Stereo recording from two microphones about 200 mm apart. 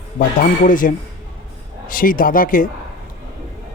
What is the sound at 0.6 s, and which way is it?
A man's voice, 40° left (ahead or behind).